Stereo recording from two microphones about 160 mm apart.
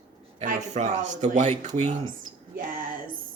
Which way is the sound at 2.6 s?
60° right (ahead or behind).